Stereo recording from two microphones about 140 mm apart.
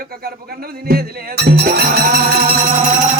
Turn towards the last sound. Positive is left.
turn(degrees=-80)